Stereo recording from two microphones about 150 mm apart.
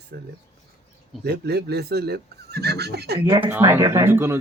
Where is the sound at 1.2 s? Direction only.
90° right.